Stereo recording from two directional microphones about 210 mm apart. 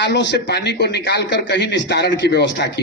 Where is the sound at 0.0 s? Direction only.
55° left (ahead or behind).